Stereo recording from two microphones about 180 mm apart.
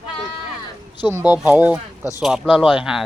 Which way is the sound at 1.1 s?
10° right (ahead or behind).